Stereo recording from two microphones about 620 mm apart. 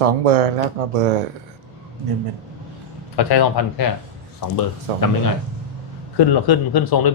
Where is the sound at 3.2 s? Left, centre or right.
Left.